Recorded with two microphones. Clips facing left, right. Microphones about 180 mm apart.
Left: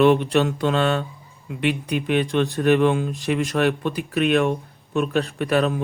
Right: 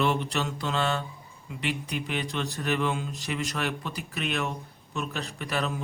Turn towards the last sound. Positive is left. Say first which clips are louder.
# left 10 dB
turn(degrees=55)  # may be behind; listen again after turning